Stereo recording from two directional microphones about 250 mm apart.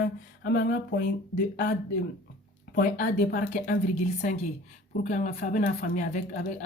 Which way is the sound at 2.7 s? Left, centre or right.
Left.